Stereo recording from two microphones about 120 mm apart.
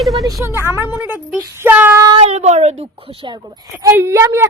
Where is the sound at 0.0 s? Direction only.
Centre (ahead or behind).